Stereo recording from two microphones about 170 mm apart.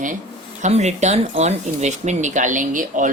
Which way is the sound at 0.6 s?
40° right (ahead or behind).